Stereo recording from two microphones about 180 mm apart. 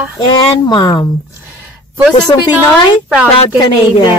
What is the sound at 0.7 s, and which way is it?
Speech, 25° left (ahead or behind).